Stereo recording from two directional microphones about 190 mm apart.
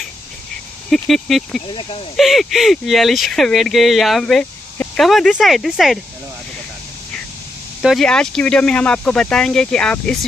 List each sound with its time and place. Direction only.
0.8 s speech: centre (ahead or behind)
1.7 s speech: 25° left (ahead or behind)
2.1 s speech: centre (ahead or behind)
7.8 s speech: centre (ahead or behind)